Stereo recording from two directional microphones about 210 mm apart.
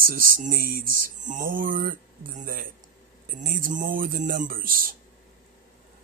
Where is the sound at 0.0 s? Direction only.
40° right (ahead or behind).